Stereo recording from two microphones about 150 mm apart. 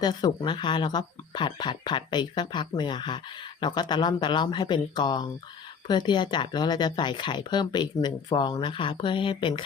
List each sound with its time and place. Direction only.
0.0 s speech: 30° left (ahead or behind)